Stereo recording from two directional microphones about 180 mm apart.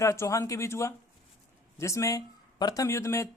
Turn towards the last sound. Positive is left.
turn(degrees=15)  # may be behind; listen again after turning